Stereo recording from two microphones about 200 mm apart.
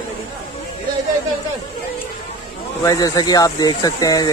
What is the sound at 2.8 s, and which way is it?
Speech, 20° left (ahead or behind).